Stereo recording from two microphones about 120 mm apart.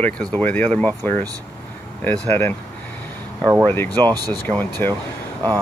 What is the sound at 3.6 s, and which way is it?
Speech, 20° left (ahead or behind).